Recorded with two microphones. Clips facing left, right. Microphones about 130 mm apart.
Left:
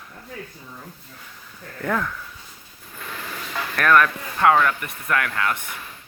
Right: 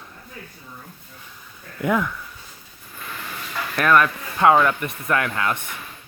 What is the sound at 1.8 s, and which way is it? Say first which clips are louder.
Speech: right 3 dB; 10° right (ahead or behind).